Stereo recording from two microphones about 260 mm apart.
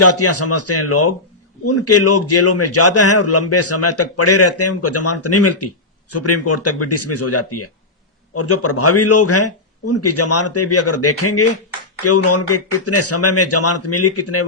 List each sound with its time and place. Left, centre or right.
0.0 s a man's voice: left